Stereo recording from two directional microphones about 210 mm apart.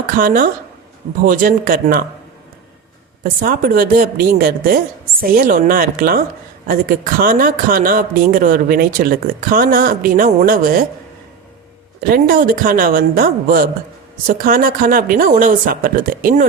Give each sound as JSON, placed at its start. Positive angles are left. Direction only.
{"t": 0.2, "sound": "speech", "side_deg": -40}
{"t": 3.2, "sound": "speech", "side_deg": -45}
{"t": 11.9, "sound": "speech", "side_deg": -45}